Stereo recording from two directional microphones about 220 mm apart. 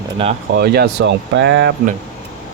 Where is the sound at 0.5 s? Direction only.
45° right (ahead or behind).